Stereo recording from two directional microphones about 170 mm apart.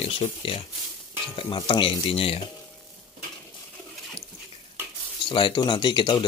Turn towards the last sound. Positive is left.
turn(degrees=25)  # may be behind; listen again after turning